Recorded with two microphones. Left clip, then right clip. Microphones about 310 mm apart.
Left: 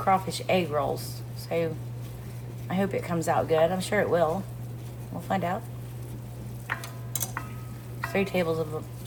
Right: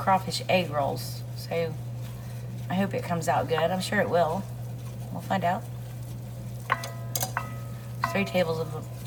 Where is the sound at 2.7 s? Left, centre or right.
Centre.